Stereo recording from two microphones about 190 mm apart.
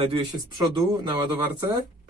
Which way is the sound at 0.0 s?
25° right (ahead or behind).